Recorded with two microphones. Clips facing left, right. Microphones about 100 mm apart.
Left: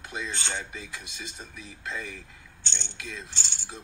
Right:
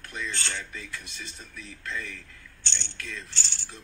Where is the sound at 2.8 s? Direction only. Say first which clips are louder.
Left 1 dB; 15° left (ahead or behind).